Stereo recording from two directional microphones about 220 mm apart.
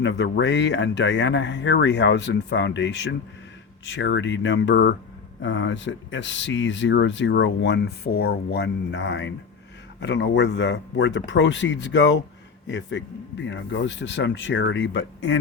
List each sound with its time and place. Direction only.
0.0 s speech: 55° left (ahead or behind)